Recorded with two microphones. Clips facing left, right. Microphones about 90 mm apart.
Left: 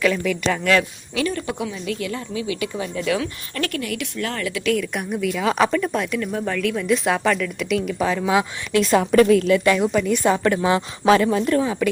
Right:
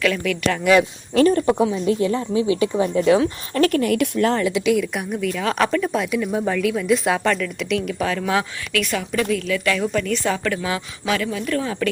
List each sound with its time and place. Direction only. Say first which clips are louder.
0.0 s speech: left 1 dB; 10° left (ahead or behind)
0.6 s speech: right 4 dB; 15° right (ahead or behind)
1.1 s speech: right 8 dB; 40° right (ahead or behind)
4.3 s speech: right 7 dB; 25° right (ahead or behind)
4.6 s speech: right 2 dB; 5° right (ahead or behind)
8.2 s speech: left 2 dB; 15° left (ahead or behind)
9.0 s a woman's voice: left 12 dB; 45° left (ahead or behind)
9.8 s speech: left 3 dB; 10° left (ahead or behind)
10.3 s speech: left 5 dB; 25° left (ahead or behind)
11.0 s speech: left 8 dB; 40° left (ahead or behind)
11.4 s speech: left 3 dB; 20° left (ahead or behind)